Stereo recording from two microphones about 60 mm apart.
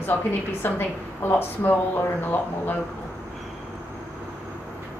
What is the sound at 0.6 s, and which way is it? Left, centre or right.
Speech, left.